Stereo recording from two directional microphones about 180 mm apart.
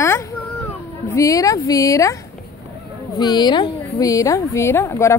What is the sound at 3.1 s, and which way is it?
A woman's voice, 25° left (ahead or behind).